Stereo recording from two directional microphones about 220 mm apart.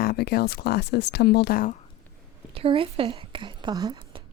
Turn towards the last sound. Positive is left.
turn(degrees=-20)  # may be behind; listen again after turning